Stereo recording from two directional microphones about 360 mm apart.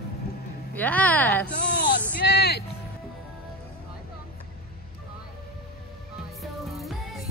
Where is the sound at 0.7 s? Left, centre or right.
Centre.